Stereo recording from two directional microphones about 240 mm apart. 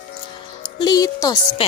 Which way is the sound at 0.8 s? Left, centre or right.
Centre.